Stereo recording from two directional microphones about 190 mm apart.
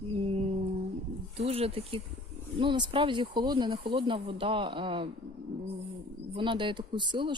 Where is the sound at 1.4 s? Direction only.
30° right (ahead or behind).